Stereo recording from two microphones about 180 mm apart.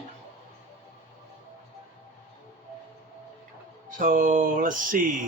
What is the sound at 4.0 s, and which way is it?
Mantra, 45° right (ahead or behind).